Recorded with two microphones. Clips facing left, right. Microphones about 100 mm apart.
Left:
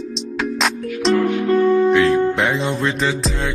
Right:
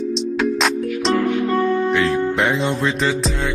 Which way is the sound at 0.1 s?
Centre (ahead or behind).